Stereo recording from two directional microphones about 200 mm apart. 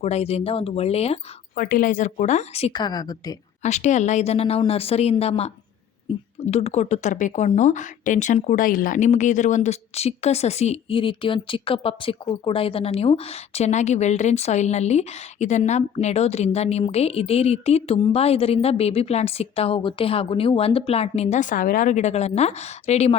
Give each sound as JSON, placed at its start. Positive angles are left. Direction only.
{"t": 0.0, "sound": "speech", "side_deg": 30}
{"t": 1.6, "sound": "speech", "side_deg": 40}
{"t": 3.6, "sound": "speech", "side_deg": 35}